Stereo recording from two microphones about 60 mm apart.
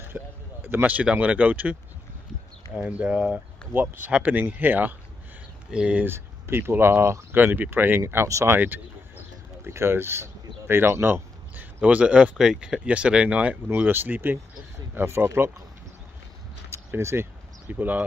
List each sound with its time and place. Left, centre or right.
0.0 s a sound: right
1.0 s speech: right
3.7 s speech: right
5.7 s speech: centre
6.0 s speech: right
7.3 s speech: right
9.7 s speech: right
11.8 s speech: right
13.7 s speech: right
15.0 s speech: right
16.7 s speech: right
17.6 s speech: right